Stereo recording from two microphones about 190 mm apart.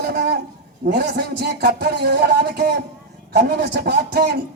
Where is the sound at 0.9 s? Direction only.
60° right (ahead or behind).